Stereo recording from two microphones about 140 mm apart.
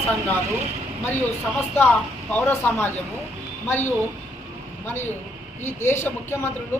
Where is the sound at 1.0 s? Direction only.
15° left (ahead or behind).